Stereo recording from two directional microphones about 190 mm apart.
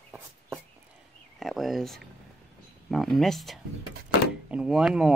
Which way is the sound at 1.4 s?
Centre (ahead or behind).